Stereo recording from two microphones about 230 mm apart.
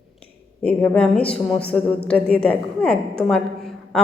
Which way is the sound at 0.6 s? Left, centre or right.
Centre.